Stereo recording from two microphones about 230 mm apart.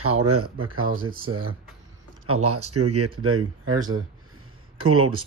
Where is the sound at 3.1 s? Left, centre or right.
Right.